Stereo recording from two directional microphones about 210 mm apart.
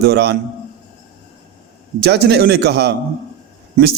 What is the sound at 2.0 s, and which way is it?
A man's voice, 50° right (ahead or behind).